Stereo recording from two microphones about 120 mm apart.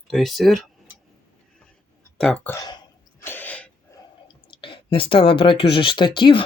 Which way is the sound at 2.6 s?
35° left (ahead or behind).